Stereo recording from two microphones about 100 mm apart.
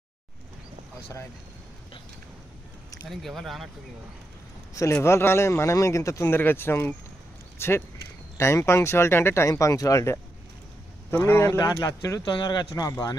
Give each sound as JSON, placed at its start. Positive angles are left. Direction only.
{"t": 3.1, "sound": "speech", "side_deg": 0}
{"t": 5.0, "sound": "speech", "side_deg": 25}
{"t": 11.6, "sound": "speech", "side_deg": 40}